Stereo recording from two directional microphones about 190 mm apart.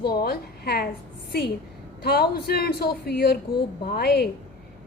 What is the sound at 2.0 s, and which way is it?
A woman's voice, 55° left (ahead or behind).